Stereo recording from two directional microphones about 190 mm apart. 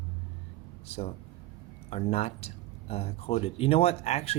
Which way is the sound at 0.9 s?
30° left (ahead or behind).